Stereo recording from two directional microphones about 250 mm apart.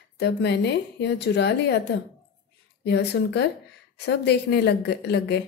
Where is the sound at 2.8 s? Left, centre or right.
Left.